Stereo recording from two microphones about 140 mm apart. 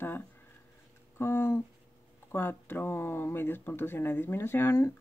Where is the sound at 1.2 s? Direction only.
15° left (ahead or behind).